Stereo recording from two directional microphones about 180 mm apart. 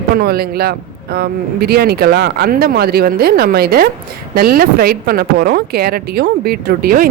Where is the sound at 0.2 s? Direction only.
60° right (ahead or behind).